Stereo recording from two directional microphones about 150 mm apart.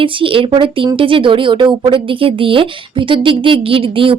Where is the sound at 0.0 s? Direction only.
35° right (ahead or behind).